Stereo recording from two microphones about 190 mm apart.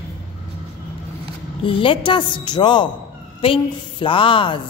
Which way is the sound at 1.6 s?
25° left (ahead or behind).